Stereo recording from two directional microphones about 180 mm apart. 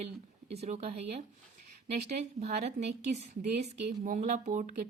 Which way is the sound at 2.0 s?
40° right (ahead or behind).